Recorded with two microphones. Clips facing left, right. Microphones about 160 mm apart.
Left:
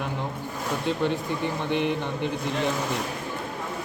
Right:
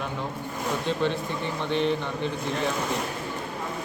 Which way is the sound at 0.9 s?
15° left (ahead or behind).